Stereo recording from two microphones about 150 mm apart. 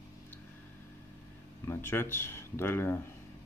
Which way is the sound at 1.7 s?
15° left (ahead or behind).